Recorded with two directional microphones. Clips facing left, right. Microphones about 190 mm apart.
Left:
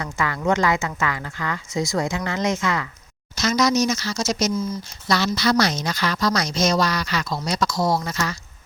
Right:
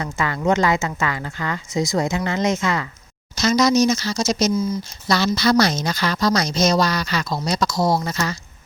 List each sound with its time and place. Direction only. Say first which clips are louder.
0.0 s speech: right 2 dB; 25° right (ahead or behind)